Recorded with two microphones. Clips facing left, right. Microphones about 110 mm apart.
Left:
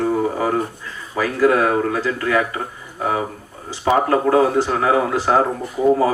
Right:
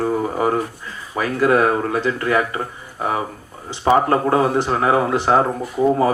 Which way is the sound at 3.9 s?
30° right (ahead or behind).